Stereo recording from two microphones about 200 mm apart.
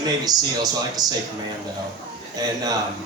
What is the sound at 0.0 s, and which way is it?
A man's voice, 20° right (ahead or behind).